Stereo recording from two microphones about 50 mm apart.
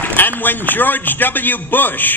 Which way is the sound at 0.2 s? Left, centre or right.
Left.